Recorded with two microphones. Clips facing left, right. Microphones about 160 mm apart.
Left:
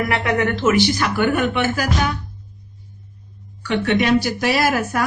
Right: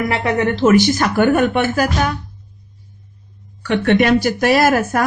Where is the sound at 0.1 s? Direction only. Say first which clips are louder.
Right 2 dB; 30° right (ahead or behind); by 1.9 s 45° right (ahead or behind).